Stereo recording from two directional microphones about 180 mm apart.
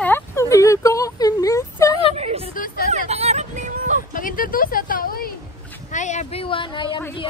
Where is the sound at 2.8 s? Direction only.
40° right (ahead or behind).